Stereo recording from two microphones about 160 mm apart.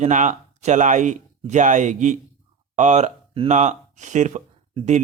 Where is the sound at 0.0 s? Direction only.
50° right (ahead or behind).